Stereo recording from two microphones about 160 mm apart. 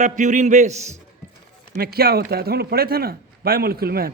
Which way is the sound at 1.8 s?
75° right (ahead or behind).